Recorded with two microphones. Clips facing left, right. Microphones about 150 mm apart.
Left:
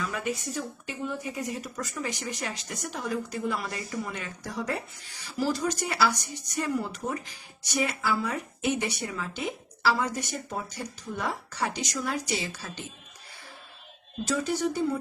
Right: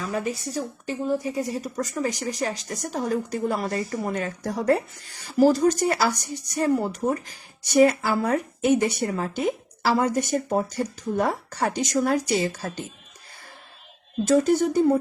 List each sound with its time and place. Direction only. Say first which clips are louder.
0.0 s speech: right 4 dB; 35° right (ahead or behind)
14.3 s speech: right 8 dB; 45° right (ahead or behind)